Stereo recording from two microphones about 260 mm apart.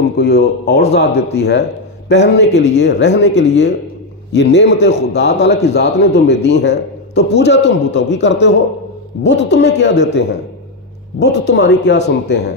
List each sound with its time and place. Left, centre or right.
0.2 s a man's voice: left
11.3 s a man's voice: left